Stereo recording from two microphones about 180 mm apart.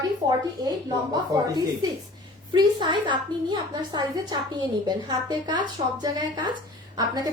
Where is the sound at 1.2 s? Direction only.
20° right (ahead or behind).